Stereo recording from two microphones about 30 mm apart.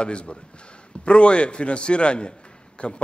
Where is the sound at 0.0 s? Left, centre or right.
Left.